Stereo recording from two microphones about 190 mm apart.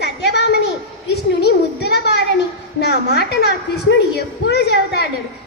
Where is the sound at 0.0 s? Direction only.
60° left (ahead or behind).